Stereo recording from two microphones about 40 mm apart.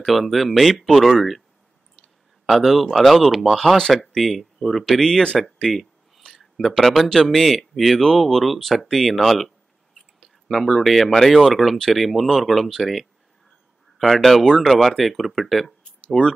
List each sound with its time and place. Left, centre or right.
0.0 s speech: centre
5.4 s a sound: centre
6.8 s speech: centre
16.2 s speech: left